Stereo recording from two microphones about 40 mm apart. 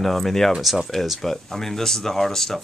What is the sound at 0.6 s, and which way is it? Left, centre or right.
Speech, centre.